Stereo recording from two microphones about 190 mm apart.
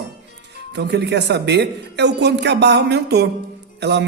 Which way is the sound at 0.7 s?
65° right (ahead or behind).